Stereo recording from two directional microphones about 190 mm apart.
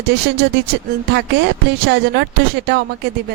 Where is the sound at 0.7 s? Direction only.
60° right (ahead or behind).